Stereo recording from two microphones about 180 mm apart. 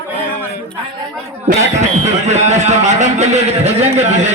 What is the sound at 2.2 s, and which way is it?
A man's voice, 40° right (ahead or behind).